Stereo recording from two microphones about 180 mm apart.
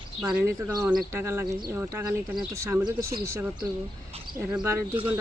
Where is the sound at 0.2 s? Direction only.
5° right (ahead or behind).